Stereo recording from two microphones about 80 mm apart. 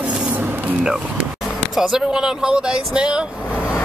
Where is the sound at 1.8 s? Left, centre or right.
Centre.